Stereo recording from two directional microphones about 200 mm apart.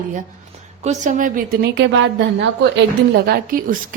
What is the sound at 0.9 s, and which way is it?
A woman's voice, 40° right (ahead or behind).